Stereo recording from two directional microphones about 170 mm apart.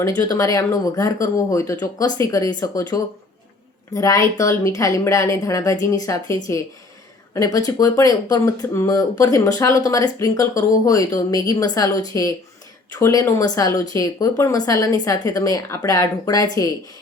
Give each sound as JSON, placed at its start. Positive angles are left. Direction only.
{"t": 0.2, "sound": "speech", "side_deg": 20}